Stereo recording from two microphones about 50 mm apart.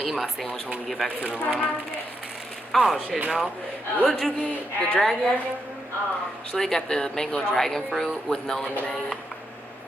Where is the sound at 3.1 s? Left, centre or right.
Right.